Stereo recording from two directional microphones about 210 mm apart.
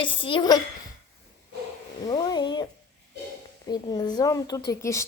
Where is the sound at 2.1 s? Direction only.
20° left (ahead or behind).